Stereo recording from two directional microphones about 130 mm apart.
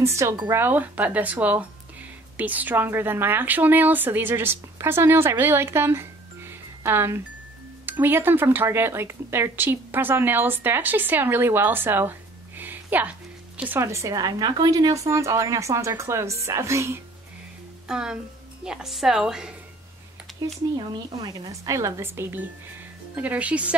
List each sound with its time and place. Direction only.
0.0 s speech: 20° right (ahead or behind)
17.8 s a woman's voice: 5° right (ahead or behind)
20.7 s speech: 30° right (ahead or behind); by 23.8 s 10° right (ahead or behind)